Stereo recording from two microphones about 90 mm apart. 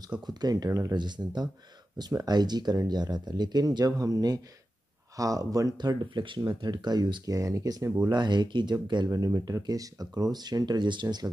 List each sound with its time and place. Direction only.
0.3 s speech: 50° right (ahead or behind)
5.8 s speech: 55° right (ahead or behind); by 7.9 s 40° right (ahead or behind)
8.1 s speech: 55° right (ahead or behind)
9.1 s speech: 40° right (ahead or behind)